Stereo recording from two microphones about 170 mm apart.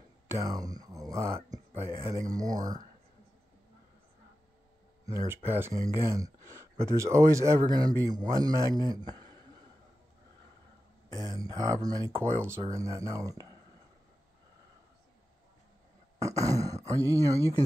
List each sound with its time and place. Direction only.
0.3 s a sound: 20° right (ahead or behind)
5.0 s speech: 20° right (ahead or behind)
11.1 s speech: 20° right (ahead or behind)
16.2 s speech: 20° right (ahead or behind)